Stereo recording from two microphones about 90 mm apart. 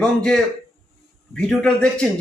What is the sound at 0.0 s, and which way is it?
A man's voice, 10° left (ahead or behind).